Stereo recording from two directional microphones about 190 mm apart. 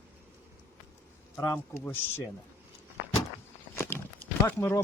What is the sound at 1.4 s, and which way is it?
Speech, 15° left (ahead or behind).